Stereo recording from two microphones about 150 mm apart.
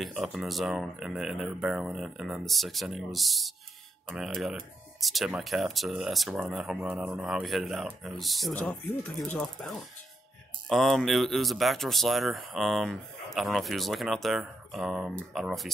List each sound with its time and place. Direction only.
0.0 s speech: 5° right (ahead or behind)